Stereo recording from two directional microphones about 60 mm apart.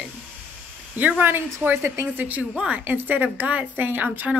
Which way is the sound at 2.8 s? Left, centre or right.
Right.